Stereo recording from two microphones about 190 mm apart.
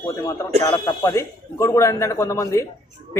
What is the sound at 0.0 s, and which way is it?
Speech, 20° left (ahead or behind).